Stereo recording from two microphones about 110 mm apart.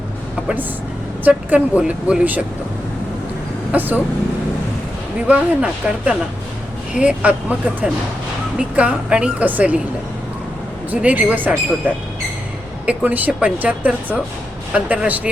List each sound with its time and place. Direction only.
1.2 s a woman's voice: 15° right (ahead or behind)
3.7 s a woman's voice: 15° right (ahead or behind)
5.3 s a woman's voice: 10° right (ahead or behind)
11.0 s a woman's voice: 15° right (ahead or behind)